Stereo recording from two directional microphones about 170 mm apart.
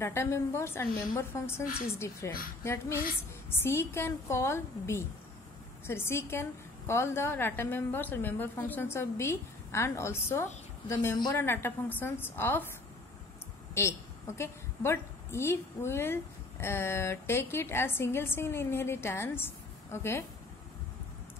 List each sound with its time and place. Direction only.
0.0 s a woman's voice: 15° left (ahead or behind)
13.7 s a woman's voice: 15° left (ahead or behind)